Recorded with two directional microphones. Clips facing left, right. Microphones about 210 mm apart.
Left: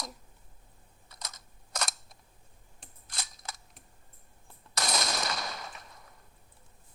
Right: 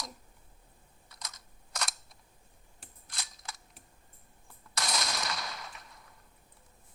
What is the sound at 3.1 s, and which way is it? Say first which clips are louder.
Cap gun: left 3 dB; 45° left (ahead or behind).